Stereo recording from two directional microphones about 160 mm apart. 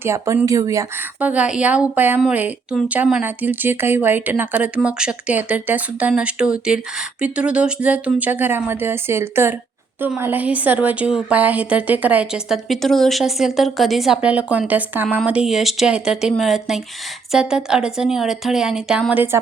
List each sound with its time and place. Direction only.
0.0 s speech: 15° right (ahead or behind)
1.2 s a woman's voice: 10° right (ahead or behind)